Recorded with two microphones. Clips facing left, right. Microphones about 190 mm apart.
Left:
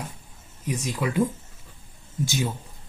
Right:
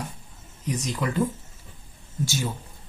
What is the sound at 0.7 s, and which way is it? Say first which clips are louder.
Speech: even; 10° left (ahead or behind).